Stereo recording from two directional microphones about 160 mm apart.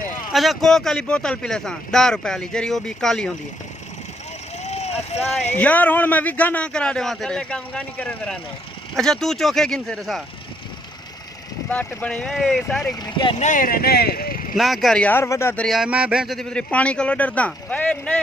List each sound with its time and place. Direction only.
0.3 s speech: centre (ahead or behind)
4.6 s vehicle: 45° left (ahead or behind)
5.6 s a man's voice: 10° left (ahead or behind)
11.7 s speech: 10° left (ahead or behind)
13.0 s speech: 30° left (ahead or behind)
13.4 s speech: 55° left (ahead or behind)
14.6 s a man's voice: centre (ahead or behind); by 15.6 s 15° left (ahead or behind)
15.6 s a man's voice: centre (ahead or behind)